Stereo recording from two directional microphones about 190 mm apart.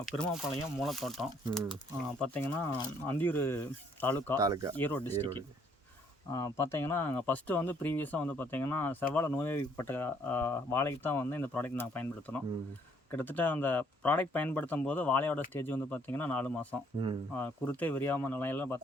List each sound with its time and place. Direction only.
0.0 s speech: centre (ahead or behind)
4.4 s speech: 20° right (ahead or behind)
4.7 s speech: 10° left (ahead or behind)